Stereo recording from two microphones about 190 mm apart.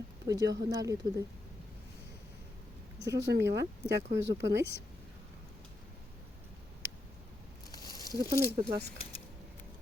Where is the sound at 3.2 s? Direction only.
70° right (ahead or behind).